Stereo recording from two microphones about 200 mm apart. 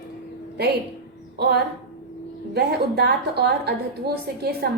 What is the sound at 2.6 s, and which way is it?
A woman's voice, 55° right (ahead or behind).